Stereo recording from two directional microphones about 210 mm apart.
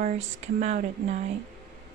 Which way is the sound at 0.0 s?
35° right (ahead or behind).